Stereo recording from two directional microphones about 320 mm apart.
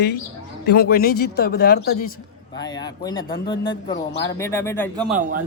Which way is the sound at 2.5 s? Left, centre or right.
Centre.